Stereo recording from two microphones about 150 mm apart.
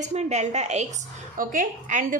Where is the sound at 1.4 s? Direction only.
65° right (ahead or behind).